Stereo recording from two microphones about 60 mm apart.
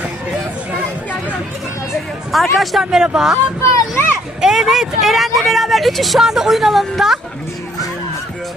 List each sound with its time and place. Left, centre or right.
2.3 s a man's voice: centre
3.6 s a child's voice: left
4.4 s speech: centre